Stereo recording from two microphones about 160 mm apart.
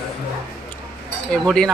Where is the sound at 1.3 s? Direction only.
5° left (ahead or behind).